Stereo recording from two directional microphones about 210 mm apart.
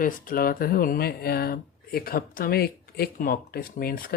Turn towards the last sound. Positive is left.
turn(degrees=45)  # may be behind; listen again after turning